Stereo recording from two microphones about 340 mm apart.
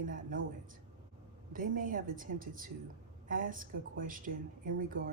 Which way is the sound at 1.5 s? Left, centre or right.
Right.